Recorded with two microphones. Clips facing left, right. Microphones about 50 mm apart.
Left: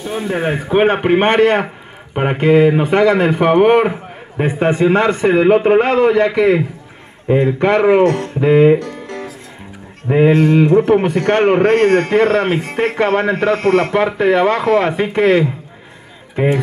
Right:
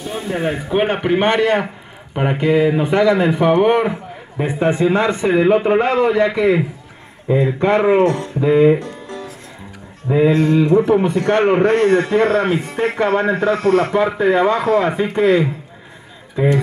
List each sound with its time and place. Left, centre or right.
0.3 s a man's voice: left